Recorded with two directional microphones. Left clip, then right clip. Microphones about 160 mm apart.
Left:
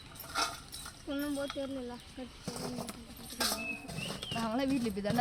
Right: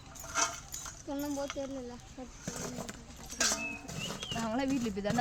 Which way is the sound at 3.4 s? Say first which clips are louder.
Right 2 dB; 10° right (ahead or behind).